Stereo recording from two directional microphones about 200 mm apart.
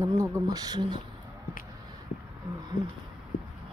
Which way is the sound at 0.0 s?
15° right (ahead or behind).